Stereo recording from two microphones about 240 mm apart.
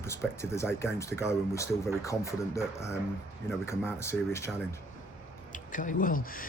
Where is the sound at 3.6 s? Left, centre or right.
Centre.